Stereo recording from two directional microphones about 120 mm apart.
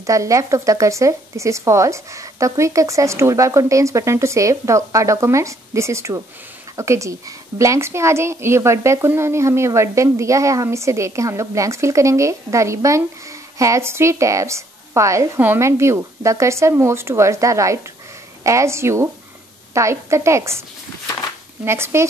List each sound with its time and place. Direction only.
0.0 s speech: 25° right (ahead or behind)
21.6 s speech: 20° right (ahead or behind)